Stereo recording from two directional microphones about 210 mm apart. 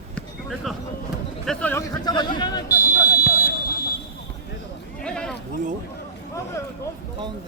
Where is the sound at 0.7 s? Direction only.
Centre (ahead or behind).